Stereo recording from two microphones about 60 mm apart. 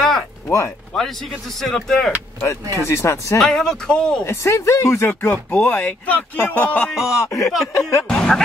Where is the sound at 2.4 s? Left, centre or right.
Left.